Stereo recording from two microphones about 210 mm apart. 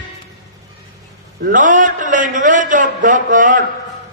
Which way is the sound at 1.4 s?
40° right (ahead or behind).